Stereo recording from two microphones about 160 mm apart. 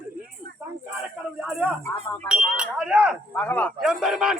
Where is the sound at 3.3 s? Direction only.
10° left (ahead or behind).